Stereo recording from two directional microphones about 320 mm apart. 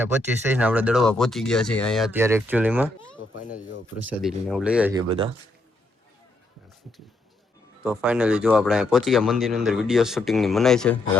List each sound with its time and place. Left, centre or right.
0.0 s speech: centre
3.4 s speech: left
4.0 s speech: centre
5.0 s speech: centre
7.8 s speech: centre